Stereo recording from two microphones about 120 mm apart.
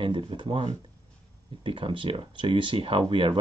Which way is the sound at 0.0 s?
45° right (ahead or behind).